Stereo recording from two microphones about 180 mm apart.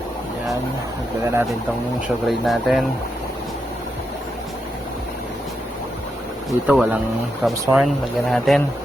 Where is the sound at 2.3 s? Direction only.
Centre (ahead or behind).